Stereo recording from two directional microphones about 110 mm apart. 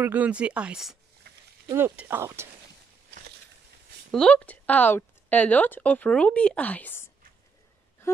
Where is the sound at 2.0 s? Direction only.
20° right (ahead or behind).